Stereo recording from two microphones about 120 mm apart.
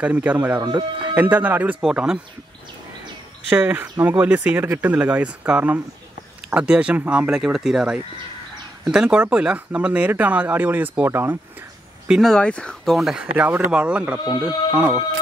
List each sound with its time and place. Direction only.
0.0 s speech: 10° right (ahead or behind)
0.6 s speech: 35° right (ahead or behind)
1.1 s speech: 15° right (ahead or behind)
3.4 s speech: 15° right (ahead or behind)
12.1 s speech: centre (ahead or behind)
13.3 s speech: 15° right (ahead or behind)